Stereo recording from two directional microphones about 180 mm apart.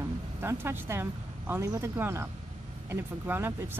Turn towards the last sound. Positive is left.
turn(degrees=-10)  # may be behind; listen again after turning